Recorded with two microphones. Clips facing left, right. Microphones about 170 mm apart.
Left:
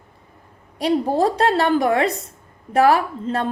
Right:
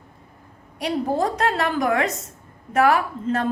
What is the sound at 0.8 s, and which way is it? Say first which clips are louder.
A woman's voice: left 4 dB; 35° left (ahead or behind).